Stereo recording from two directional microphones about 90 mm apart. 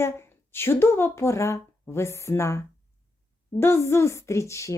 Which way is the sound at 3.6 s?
30° left (ahead or behind).